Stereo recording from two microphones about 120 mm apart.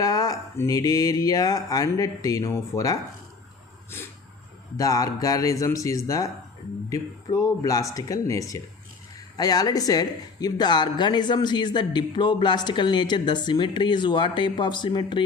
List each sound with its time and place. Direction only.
0.0 s speech: 30° left (ahead or behind)
4.8 s speech: 30° left (ahead or behind)